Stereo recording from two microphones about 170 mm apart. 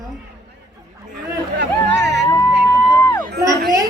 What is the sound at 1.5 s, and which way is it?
Chatter, 90° right.